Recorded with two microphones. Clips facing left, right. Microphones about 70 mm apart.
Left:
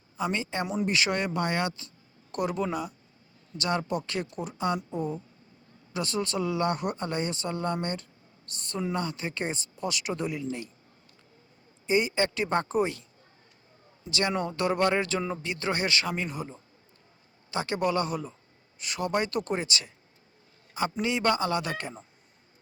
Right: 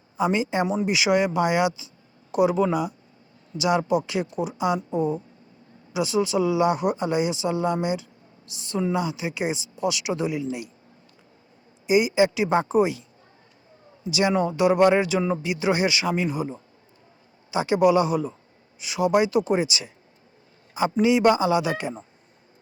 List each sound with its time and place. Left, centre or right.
0.2 s speech: centre
11.9 s speech: centre
14.1 s speech: centre
21.0 s speech: centre